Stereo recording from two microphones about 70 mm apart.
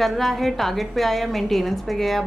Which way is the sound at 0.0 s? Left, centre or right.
Centre.